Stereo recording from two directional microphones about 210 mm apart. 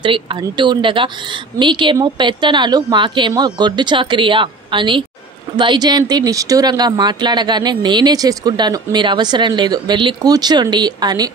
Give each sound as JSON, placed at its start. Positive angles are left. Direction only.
{"t": 0.0, "sound": "speech", "side_deg": -25}